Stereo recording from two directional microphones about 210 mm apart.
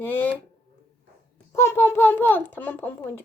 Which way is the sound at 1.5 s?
15° left (ahead or behind).